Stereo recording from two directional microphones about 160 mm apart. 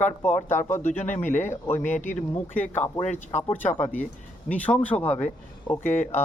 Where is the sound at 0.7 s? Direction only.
50° left (ahead or behind).